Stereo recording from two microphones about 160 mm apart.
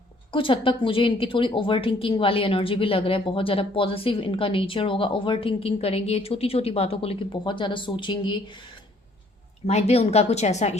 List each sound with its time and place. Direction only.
0.3 s a woman's voice: 30° left (ahead or behind)
9.6 s a woman's voice: 40° left (ahead or behind)